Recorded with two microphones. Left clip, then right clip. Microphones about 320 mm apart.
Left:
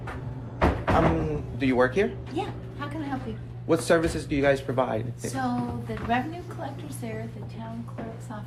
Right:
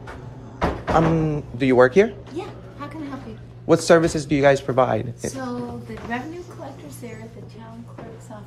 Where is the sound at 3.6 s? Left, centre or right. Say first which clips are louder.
Right 7 dB; right.